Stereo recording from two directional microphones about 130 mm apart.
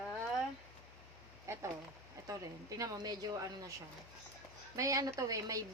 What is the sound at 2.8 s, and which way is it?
Speech, 30° right (ahead or behind).